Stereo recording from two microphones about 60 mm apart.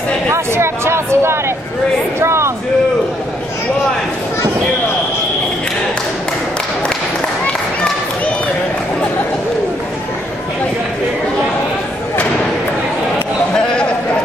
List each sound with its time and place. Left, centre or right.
0.3 s speech: right